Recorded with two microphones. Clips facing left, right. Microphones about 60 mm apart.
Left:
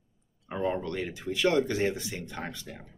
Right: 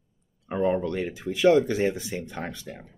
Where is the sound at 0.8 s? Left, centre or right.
Right.